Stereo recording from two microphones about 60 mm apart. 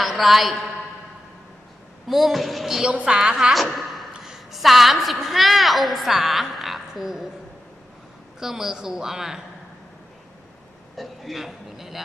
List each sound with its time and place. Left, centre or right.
0.0 s a woman's voice: centre
2.0 s speech: centre
2.9 s speech: centre
3.5 s a sound: centre
4.2 s a woman's voice: centre
8.4 s speech: centre
10.9 s a man's voice: centre